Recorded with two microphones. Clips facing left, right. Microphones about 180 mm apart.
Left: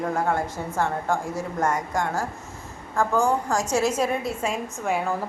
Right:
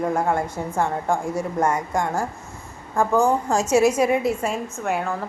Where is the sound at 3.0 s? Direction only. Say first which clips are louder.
Right 3 dB; 20° right (ahead or behind).